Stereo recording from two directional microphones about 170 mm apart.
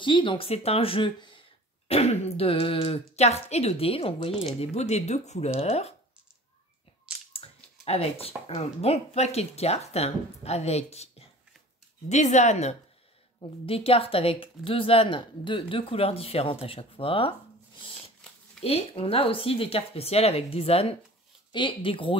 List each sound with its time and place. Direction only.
0.0 s a woman's voice: 30° left (ahead or behind)
7.8 s a woman's voice: 35° left (ahead or behind)
18.6 s a woman's voice: 35° left (ahead or behind)